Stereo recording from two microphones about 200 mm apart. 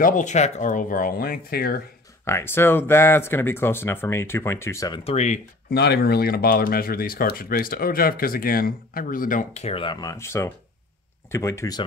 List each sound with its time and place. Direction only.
0.0 s speech: 40° left (ahead or behind)
2.2 s speech: 10° left (ahead or behind)
5.1 s speech: 35° left (ahead or behind)
5.7 s speech: 55° left (ahead or behind); by 11.8 s 15° left (ahead or behind)